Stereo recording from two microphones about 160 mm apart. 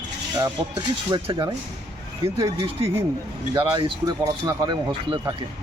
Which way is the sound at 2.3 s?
20° right (ahead or behind).